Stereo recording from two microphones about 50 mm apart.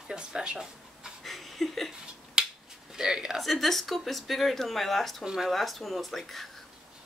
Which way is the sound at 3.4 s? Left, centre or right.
Centre.